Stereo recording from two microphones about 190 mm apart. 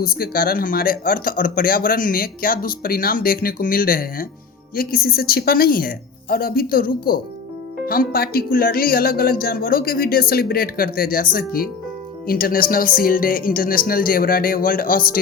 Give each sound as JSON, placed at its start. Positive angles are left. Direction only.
{"t": 0.0, "sound": "speech", "side_deg": 50}